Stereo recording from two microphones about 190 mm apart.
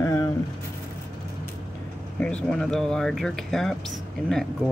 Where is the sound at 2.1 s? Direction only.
5° left (ahead or behind).